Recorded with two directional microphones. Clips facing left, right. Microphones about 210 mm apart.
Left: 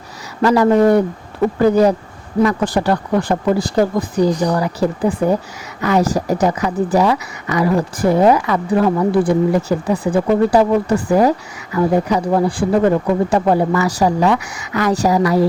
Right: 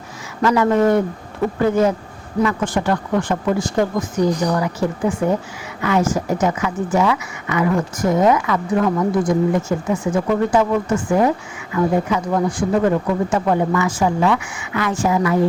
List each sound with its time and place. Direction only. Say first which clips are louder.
0.4 s a woman's voice: left 3 dB; 35° left (ahead or behind)